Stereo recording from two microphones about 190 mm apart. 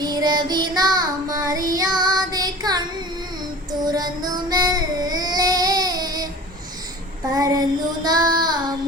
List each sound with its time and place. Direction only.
0.0 s child singing: 20° right (ahead or behind)
7.3 s child singing: 20° right (ahead or behind)